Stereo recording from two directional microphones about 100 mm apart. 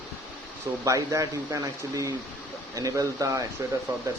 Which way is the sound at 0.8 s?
35° right (ahead or behind).